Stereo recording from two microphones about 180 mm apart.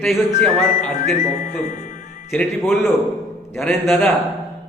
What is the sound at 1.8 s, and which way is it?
Music, 45° left (ahead or behind).